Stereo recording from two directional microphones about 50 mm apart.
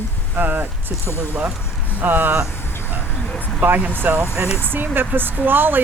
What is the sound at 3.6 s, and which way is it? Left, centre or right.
Speech, right.